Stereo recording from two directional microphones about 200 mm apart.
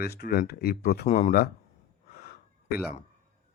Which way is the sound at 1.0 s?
35° left (ahead or behind).